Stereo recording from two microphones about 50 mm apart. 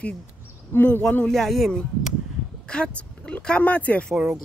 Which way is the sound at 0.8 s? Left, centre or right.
Left.